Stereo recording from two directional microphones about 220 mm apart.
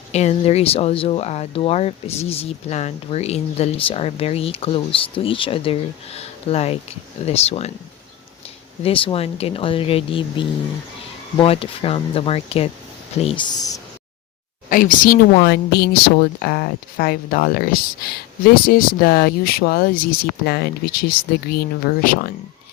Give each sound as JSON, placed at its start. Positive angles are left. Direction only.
{"t": 0.1, "sound": "speech", "side_deg": 30}
{"t": 8.8, "sound": "speech", "side_deg": 25}
{"t": 14.7, "sound": "speech", "side_deg": 40}